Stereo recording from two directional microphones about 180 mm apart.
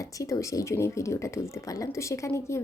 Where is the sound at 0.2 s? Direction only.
20° left (ahead or behind).